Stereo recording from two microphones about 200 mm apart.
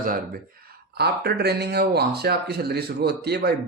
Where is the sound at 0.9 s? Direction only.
55° right (ahead or behind).